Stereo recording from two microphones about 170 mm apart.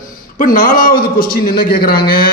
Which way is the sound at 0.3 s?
55° left (ahead or behind).